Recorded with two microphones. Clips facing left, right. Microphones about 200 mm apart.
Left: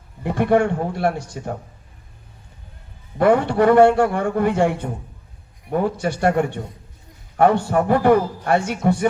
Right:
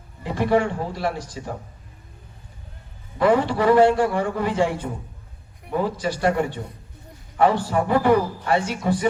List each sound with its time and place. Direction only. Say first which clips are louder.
0.2 s a man's voice: left 3 dB; 55° left (ahead or behind)
3.2 s a man's voice: left 3 dB; 55° left (ahead or behind)